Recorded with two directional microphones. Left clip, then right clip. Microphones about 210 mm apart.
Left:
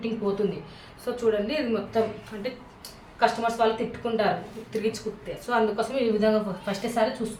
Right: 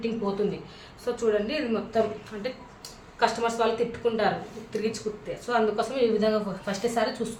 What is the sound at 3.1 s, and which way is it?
A woman's voice, 10° right (ahead or behind).